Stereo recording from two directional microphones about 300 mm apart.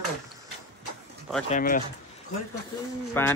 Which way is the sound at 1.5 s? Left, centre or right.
Left.